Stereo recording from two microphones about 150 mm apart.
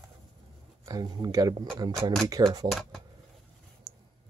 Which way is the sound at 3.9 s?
25° right (ahead or behind).